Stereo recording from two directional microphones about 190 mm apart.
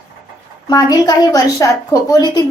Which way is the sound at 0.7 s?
20° left (ahead or behind).